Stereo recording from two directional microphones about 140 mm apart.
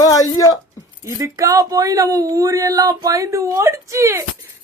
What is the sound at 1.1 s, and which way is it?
Speech, 20° right (ahead or behind).